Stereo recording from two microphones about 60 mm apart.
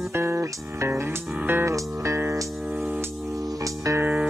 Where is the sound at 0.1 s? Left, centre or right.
Right.